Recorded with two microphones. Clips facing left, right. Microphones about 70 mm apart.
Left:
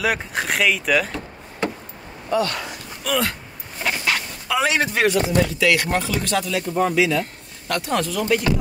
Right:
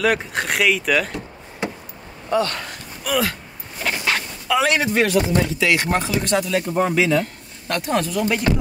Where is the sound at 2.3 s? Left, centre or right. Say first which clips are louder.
Right 1 dB; right.